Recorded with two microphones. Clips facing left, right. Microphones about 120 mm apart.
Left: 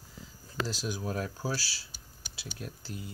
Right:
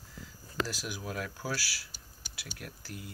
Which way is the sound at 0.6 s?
25° left (ahead or behind).